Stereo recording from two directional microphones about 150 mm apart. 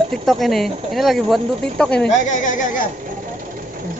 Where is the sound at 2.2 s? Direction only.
55° left (ahead or behind).